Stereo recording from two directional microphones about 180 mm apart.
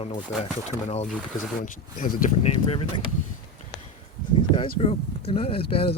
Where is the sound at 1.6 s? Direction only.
50° left (ahead or behind).